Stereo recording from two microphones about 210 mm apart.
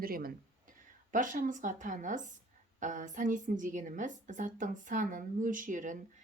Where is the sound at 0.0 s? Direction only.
45° right (ahead or behind).